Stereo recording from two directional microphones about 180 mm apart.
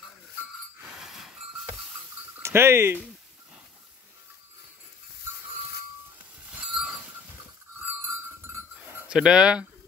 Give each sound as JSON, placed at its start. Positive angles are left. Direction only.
{"t": 0.7, "sound": "train", "side_deg": -5}
{"t": 2.3, "sound": "speech", "side_deg": -15}
{"t": 6.5, "sound": "train", "side_deg": -5}
{"t": 8.5, "sound": "cowbell", "side_deg": -15}
{"t": 9.1, "sound": "speech", "side_deg": -5}